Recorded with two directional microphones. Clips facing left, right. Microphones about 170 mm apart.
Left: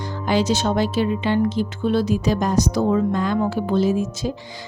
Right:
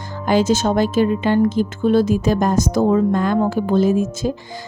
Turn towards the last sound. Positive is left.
turn(degrees=-50)  # may be behind; listen again after turning